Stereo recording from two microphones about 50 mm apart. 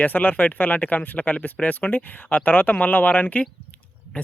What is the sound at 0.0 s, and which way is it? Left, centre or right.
A man's voice, left.